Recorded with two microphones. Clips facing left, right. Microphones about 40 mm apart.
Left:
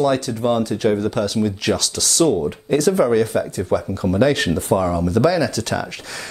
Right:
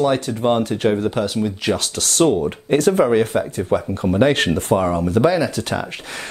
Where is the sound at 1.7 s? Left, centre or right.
Right.